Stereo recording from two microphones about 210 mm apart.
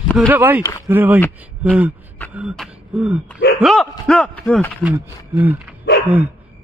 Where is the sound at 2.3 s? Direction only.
Centre (ahead or behind).